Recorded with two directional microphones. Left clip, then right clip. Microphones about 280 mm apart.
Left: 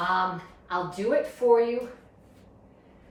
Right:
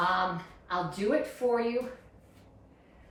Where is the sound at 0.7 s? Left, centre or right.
Centre.